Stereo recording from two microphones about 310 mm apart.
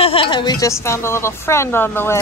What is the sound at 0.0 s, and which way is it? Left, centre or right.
A woman's voice, centre.